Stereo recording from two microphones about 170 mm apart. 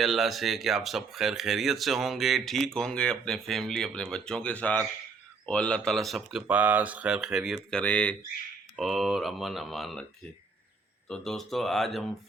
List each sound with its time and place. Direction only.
0.0 s speech: centre (ahead or behind)
11.1 s speech: centre (ahead or behind)